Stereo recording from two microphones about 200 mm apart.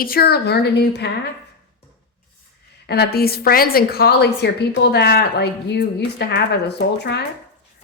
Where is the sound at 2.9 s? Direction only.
50° left (ahead or behind).